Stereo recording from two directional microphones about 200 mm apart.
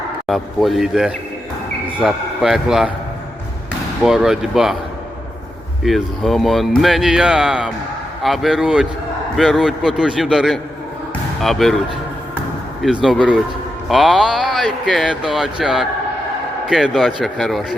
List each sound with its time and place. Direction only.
0.3 s speech: centre (ahead or behind)
4.0 s speech: centre (ahead or behind)
5.8 s speech: centre (ahead or behind)
12.8 s speech: centre (ahead or behind)